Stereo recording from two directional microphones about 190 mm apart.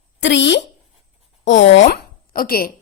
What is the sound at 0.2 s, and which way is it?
Speech, 70° left (ahead or behind).